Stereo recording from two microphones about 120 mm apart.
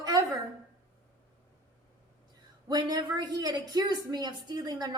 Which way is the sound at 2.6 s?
35° right (ahead or behind).